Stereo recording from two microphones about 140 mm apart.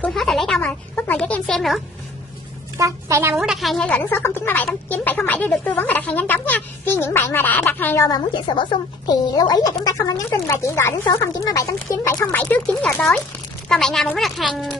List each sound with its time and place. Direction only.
0.0 s speech: centre (ahead or behind)
2.8 s a child's voice: 20° right (ahead or behind)
3.3 s speech: centre (ahead or behind); by 8.1 s 15° left (ahead or behind)
8.1 s a woman's voice: 35° left (ahead or behind); by 14.8 s centre (ahead or behind)